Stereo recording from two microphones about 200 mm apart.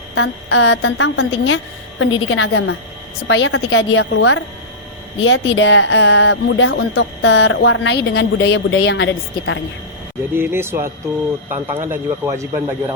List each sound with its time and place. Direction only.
0.2 s a woman's voice: 65° left (ahead or behind); by 4.4 s 90° left
5.2 s speech: 80° left
10.3 s speech: 10° right (ahead or behind)